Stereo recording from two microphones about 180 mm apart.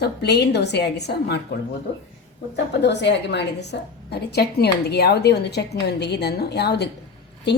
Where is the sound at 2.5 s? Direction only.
75° left (ahead or behind).